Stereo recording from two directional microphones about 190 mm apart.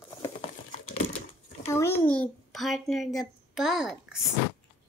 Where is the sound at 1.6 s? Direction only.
15° left (ahead or behind); by 4.2 s centre (ahead or behind).